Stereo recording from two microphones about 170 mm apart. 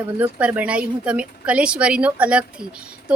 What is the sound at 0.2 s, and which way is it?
A woman's voice, 10° right (ahead or behind).